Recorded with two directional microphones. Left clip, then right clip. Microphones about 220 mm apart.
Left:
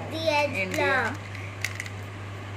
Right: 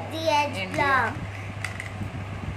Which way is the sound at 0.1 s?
35° right (ahead or behind).